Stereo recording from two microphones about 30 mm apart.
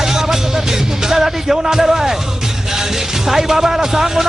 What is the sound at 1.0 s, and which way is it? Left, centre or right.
Speech, centre.